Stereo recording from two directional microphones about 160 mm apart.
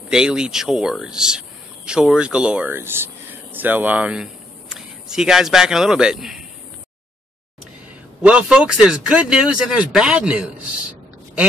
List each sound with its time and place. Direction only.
0.1 s speech: 5° right (ahead or behind)
8.2 s speech: 5° right (ahead or behind)